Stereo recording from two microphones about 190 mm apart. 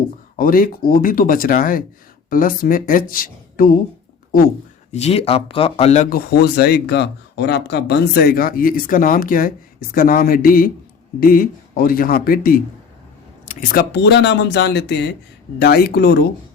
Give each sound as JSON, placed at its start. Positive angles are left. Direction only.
{"t": 0.3, "sound": "speech", "side_deg": 50}
{"t": 4.9, "sound": "speech", "side_deg": 35}